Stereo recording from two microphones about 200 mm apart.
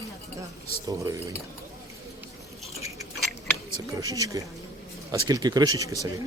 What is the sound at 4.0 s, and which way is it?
Speech, 15° right (ahead or behind).